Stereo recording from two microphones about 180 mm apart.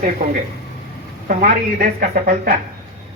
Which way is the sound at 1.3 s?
50° right (ahead or behind).